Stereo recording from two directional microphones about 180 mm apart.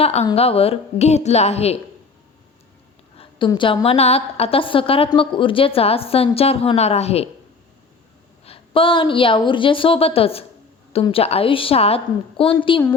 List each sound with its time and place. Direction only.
0.0 s a woman's voice: 35° left (ahead or behind)
3.2 s a woman's voice: 25° left (ahead or behind)
8.4 s a woman's voice: 30° left (ahead or behind)